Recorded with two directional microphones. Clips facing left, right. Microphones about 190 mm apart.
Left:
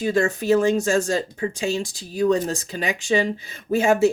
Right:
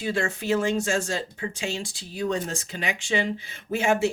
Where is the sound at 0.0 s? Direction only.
40° left (ahead or behind).